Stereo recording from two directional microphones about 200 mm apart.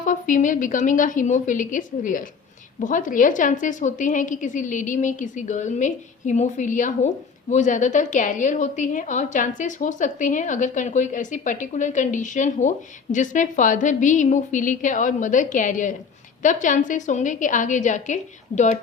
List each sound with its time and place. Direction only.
0.0 s a woman's voice: 40° left (ahead or behind)